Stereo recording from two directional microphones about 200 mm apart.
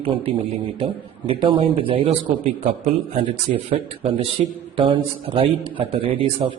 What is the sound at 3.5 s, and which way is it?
A man's voice, 40° right (ahead or behind).